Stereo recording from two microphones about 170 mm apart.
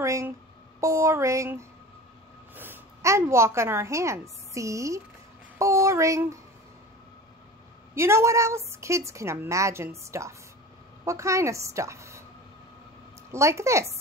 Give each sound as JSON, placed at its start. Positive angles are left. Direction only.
{"t": 0.0, "sound": "a woman's voice", "side_deg": -15}
{"t": 7.9, "sound": "a woman's voice", "side_deg": -15}
{"t": 13.3, "sound": "a woman's voice", "side_deg": -15}